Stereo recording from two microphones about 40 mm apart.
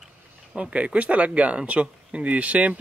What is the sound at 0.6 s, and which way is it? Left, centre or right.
Speech, right.